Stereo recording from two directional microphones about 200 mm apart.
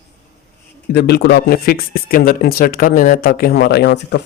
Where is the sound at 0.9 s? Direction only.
55° left (ahead or behind).